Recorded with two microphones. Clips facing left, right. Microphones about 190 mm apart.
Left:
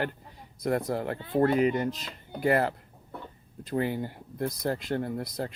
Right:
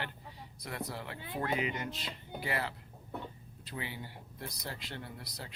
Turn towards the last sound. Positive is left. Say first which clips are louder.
# left 14 dB
turn(degrees=50)  # may be behind; listen again after turning